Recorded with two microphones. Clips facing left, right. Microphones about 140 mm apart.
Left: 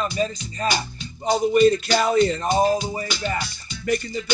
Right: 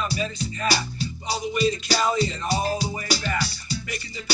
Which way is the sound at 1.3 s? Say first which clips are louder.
Left 8 dB; 50° left (ahead or behind).